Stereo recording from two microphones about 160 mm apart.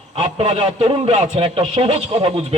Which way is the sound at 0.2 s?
40° right (ahead or behind).